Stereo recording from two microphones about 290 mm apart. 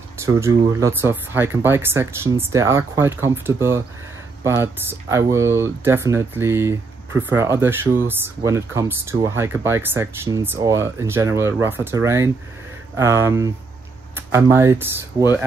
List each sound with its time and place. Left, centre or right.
0.2 s speech: centre